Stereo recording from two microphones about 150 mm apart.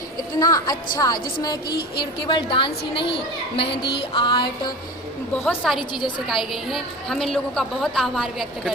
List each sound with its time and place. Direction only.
0.3 s a woman's voice: 25° left (ahead or behind)
2.2 s music: 35° left (ahead or behind)
3.6 s speech: 90° left
4.1 s music: 30° left (ahead or behind)
5.6 s a woman's voice: centre (ahead or behind)